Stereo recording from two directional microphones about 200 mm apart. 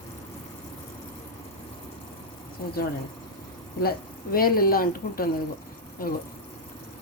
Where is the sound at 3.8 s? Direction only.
50° left (ahead or behind).